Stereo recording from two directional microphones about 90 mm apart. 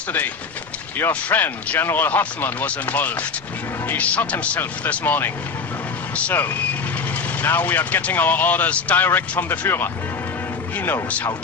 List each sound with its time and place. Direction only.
0.9 s speech: 25° left (ahead or behind)